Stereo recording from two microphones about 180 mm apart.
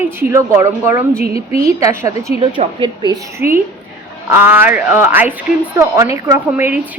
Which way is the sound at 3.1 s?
15° right (ahead or behind).